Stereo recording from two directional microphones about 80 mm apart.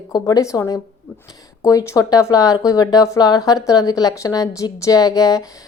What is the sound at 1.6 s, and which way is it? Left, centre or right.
A woman's voice, left.